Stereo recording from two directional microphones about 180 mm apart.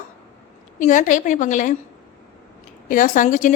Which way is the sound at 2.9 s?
45° left (ahead or behind).